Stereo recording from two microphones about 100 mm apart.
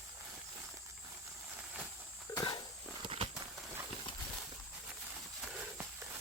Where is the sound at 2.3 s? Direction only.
50° left (ahead or behind).